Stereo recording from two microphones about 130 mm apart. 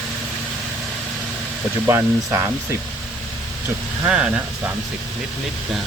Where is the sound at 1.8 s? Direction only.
20° right (ahead or behind).